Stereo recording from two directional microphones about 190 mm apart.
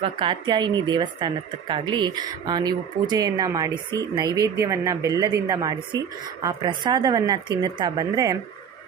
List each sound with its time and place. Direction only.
0.0 s speech: 25° right (ahead or behind)